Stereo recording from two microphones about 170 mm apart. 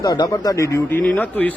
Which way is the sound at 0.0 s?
20° left (ahead or behind).